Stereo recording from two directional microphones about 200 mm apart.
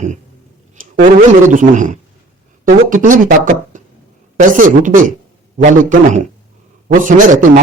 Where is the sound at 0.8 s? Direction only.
40° right (ahead or behind).